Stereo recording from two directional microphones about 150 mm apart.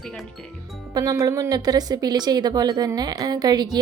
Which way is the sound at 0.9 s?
25° right (ahead or behind).